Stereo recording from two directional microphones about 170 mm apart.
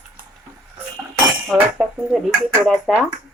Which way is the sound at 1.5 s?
5° right (ahead or behind).